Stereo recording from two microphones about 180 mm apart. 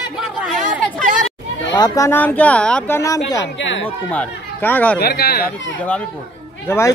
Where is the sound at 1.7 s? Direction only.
20° left (ahead or behind).